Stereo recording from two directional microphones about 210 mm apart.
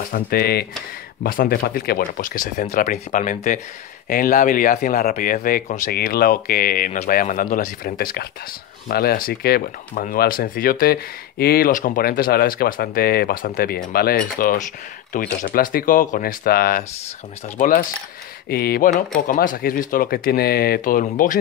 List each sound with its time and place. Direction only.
0.1 s speech: 45° left (ahead or behind)